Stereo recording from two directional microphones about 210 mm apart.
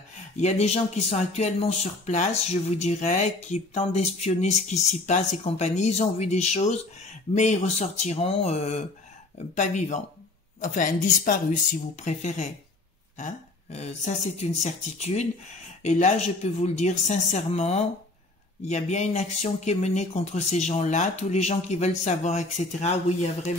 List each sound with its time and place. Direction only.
0.4 s speech: 30° left (ahead or behind)